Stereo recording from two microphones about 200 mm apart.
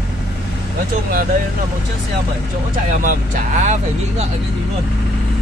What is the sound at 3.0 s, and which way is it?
Speech, 40° right (ahead or behind).